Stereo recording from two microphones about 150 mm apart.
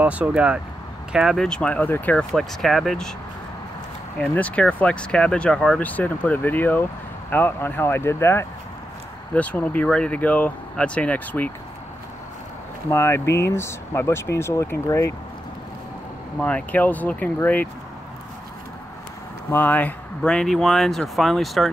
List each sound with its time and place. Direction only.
0.0 s speech: 10° right (ahead or behind)
4.2 s speech: 10° left (ahead or behind)
12.9 s speech: 15° left (ahead or behind)
16.3 s speech: 10° left (ahead or behind)
19.5 s speech: 10° left (ahead or behind)